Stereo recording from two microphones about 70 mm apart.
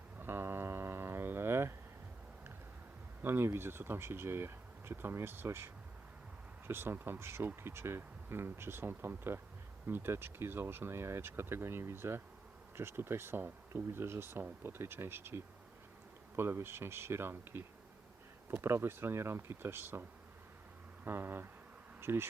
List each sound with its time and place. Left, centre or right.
0.2 s mantra: right
3.2 s speech: right